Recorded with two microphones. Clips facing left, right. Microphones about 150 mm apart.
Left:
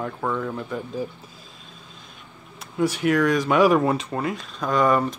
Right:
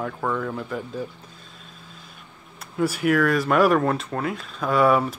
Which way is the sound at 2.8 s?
5° right (ahead or behind).